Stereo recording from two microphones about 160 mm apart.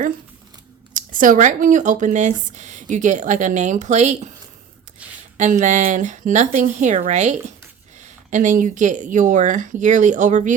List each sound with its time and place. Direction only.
0.9 s speech: 55° right (ahead or behind)
5.4 s speech: 50° right (ahead or behind)